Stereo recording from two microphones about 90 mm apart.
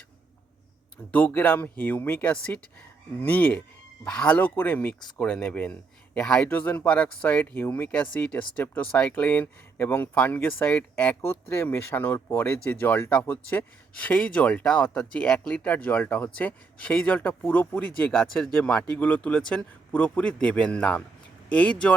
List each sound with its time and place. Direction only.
1.1 s speech: 20° left (ahead or behind)
6.5 s speech: 20° left (ahead or behind)
11.3 s speech: 25° left (ahead or behind)